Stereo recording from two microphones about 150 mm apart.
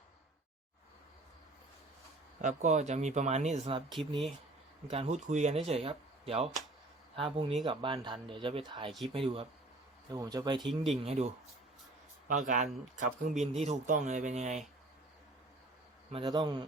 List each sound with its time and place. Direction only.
2.4 s speech: 55° right (ahead or behind)
4.9 s speech: 45° right (ahead or behind)
10.1 s speech: 25° right (ahead or behind)
10.6 s speech: centre (ahead or behind)
11.0 s speech: 45° right (ahead or behind)
12.3 s speech: 55° right (ahead or behind)
16.1 s speech: 30° right (ahead or behind)